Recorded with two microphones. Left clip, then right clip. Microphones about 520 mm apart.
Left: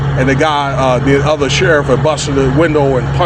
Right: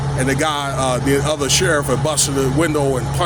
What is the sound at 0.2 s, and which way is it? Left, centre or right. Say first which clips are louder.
Speech: left 7 dB; right.